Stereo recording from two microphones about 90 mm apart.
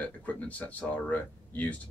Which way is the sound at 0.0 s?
15° left (ahead or behind).